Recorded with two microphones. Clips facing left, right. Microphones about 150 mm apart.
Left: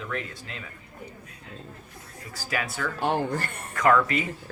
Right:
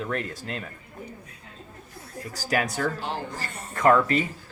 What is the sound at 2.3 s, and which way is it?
Speech, 40° right (ahead or behind).